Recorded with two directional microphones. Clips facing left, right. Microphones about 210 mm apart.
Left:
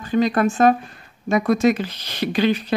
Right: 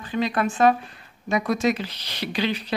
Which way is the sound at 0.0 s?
45° left (ahead or behind).